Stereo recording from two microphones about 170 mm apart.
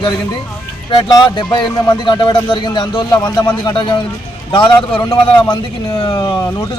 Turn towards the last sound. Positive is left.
turn(degrees=25)  # may be behind; listen again after turning